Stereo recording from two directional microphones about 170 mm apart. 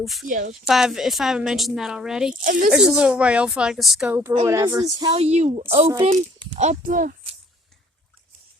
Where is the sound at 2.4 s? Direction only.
50° right (ahead or behind).